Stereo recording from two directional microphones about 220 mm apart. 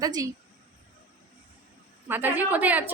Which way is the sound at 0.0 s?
15° right (ahead or behind).